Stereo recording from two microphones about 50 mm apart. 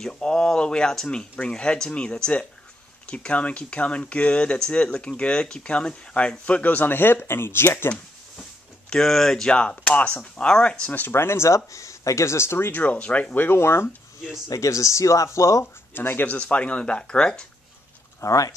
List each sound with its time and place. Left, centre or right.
0.0 s speech: centre; by 7.9 s left
8.9 s speech: centre
10.9 s speech: left
11.1 s speech: left
13.4 s speech: left
14.6 s speech: left
15.6 s speech: left
16.3 s speech: left
18.2 s speech: left